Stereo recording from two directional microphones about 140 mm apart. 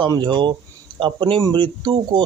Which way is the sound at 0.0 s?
30° right (ahead or behind).